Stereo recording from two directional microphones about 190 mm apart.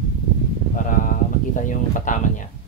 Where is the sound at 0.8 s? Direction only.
45° left (ahead or behind).